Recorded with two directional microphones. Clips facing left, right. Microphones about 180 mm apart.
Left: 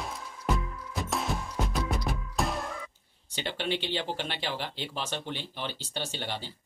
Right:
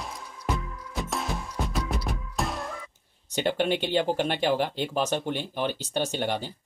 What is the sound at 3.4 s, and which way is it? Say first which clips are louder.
Speech: right 7 dB; 50° right (ahead or behind).